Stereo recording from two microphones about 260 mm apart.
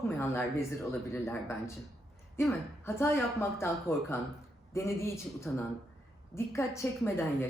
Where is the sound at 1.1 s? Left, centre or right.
Centre.